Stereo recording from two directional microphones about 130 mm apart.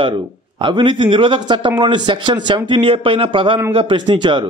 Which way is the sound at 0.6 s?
40° right (ahead or behind).